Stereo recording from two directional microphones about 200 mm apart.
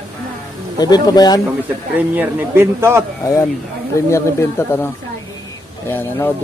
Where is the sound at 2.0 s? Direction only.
10° right (ahead or behind).